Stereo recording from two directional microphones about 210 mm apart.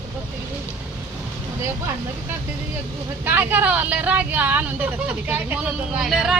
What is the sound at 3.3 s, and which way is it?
Speech, 10° right (ahead or behind).